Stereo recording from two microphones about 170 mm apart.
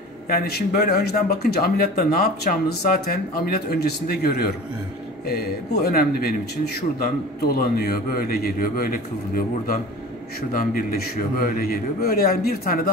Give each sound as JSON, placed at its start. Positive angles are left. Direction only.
{"t": 0.3, "sound": "speech", "side_deg": 65}